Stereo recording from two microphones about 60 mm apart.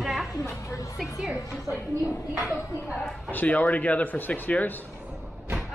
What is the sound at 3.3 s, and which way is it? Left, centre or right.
Speech, left.